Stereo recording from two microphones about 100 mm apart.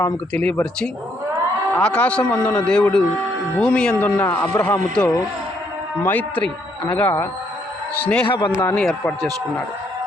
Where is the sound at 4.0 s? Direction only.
20° left (ahead or behind).